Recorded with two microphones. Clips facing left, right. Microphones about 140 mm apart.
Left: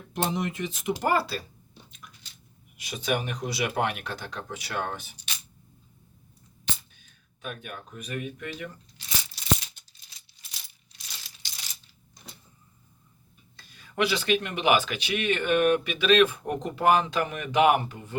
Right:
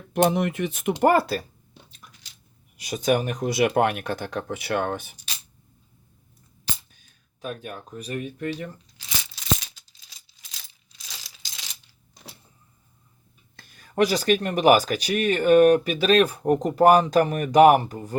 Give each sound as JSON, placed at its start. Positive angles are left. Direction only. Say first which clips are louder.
{"t": 0.1, "sound": "speech", "louder": "right 8 dB", "side_deg": -60}
{"t": 2.7, "sound": "speech", "louder": "right 6 dB", "side_deg": -40}
{"t": 6.9, "sound": "speech", "louder": "left 1 dB", "side_deg": -40}
{"t": 9.0, "sound": "a sound", "louder": "left 1 dB", "side_deg": -90}
{"t": 10.7, "sound": "coin", "louder": "right 3 dB", "side_deg": -90}
{"t": 13.6, "sound": "speech", "louder": "right 6 dB", "side_deg": -45}